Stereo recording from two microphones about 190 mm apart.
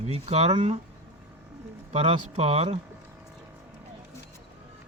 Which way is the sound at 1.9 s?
35° right (ahead or behind).